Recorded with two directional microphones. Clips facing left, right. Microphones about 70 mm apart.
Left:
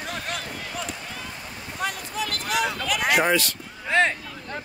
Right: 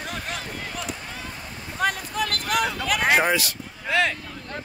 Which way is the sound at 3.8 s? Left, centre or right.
Left.